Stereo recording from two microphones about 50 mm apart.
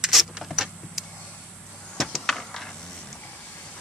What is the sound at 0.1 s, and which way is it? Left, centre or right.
Vehicle, centre.